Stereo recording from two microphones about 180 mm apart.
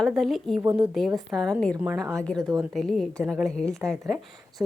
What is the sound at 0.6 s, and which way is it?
Speech, 20° right (ahead or behind).